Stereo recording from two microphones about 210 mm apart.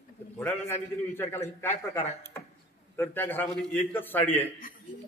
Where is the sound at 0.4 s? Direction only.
10° left (ahead or behind).